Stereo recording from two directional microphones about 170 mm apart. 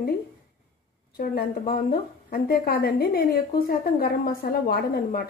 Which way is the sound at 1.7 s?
60° left (ahead or behind).